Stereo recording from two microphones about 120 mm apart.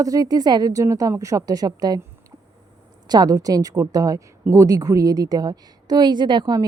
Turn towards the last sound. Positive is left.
turn(degrees=-35)  # may be behind; listen again after turning